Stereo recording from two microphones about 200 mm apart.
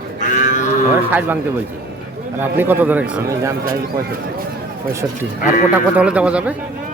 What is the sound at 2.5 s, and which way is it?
Speech, 10° right (ahead or behind).